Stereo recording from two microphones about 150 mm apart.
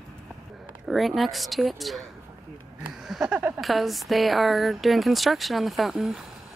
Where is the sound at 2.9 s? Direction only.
Centre (ahead or behind).